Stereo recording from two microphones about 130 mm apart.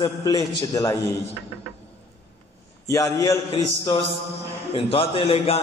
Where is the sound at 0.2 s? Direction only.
30° left (ahead or behind).